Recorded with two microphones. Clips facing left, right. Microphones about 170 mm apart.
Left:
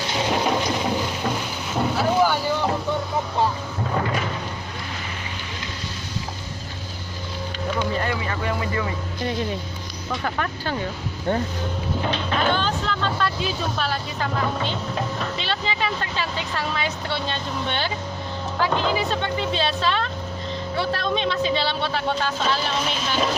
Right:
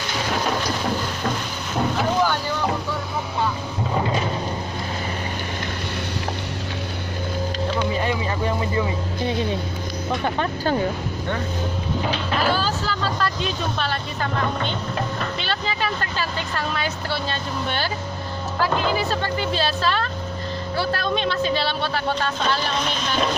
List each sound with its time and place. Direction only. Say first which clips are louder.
0.1 s a sound: left 2 dB; 20° left (ahead or behind)
0.8 s boat: even; 5° left (ahead or behind)
3.9 s thunder: right 2 dB; 20° right (ahead or behind)
7.9 s music: right 2 dB; 20° right (ahead or behind)
12.1 s speech: even; 5° right (ahead or behind)